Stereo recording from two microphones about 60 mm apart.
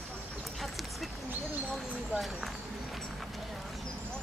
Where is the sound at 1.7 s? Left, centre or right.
Centre.